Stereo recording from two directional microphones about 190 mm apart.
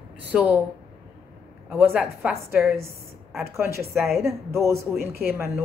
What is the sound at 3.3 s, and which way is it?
Speech, 15° right (ahead or behind).